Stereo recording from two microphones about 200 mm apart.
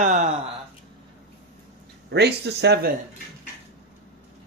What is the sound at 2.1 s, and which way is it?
Speech, 55° right (ahead or behind).